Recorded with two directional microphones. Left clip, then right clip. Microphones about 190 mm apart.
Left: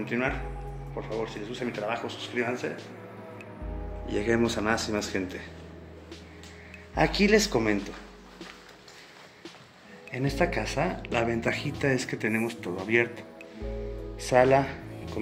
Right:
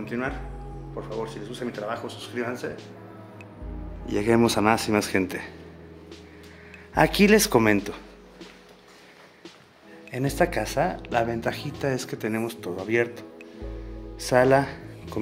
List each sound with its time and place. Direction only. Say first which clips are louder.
0.0 s speech: left 1 dB; 10° right (ahead or behind)
1.6 s speech: even; centre (ahead or behind)
1.9 s speech: even; 15° right (ahead or behind)
4.1 s speech: right 5 dB; 50° right (ahead or behind)
6.9 s speech: right 4 dB; 50° right (ahead or behind)
10.1 s speech: right 3 dB; 35° right (ahead or behind)
10.9 s speech: right 3 dB; 25° right (ahead or behind)
14.3 s speech: right 2 dB; 35° right (ahead or behind)